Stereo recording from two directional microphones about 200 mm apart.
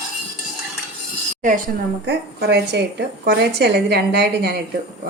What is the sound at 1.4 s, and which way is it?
Speech, 40° right (ahead or behind).